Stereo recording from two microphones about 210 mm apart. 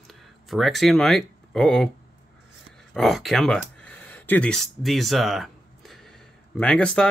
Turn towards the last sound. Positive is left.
turn(degrees=5)  # may be behind; listen again after turning